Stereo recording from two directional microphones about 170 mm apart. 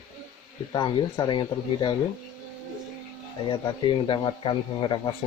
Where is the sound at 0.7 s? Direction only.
25° left (ahead or behind).